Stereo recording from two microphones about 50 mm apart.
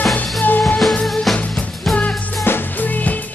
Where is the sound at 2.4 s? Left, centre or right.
Left.